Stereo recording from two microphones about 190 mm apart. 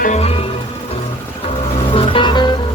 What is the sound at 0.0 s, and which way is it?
Music, 35° left (ahead or behind).